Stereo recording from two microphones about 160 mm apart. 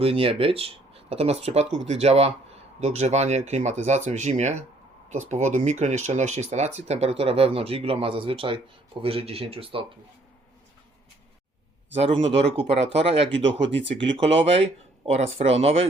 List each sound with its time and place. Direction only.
0.0 s speech: 35° right (ahead or behind)
11.9 s speech: 40° right (ahead or behind)